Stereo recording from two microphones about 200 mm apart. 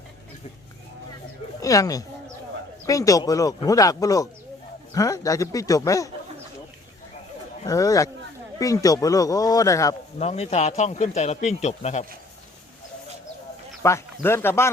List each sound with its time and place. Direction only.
1.6 s speech: 15° left (ahead or behind)
7.6 s speech: 15° left (ahead or behind)
10.2 s speech: 30° left (ahead or behind)
13.8 s speech: 15° left (ahead or behind)